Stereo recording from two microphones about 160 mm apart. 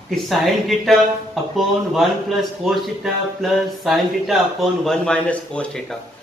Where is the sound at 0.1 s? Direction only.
Centre (ahead or behind).